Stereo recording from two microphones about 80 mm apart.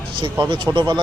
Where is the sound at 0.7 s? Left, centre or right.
Right.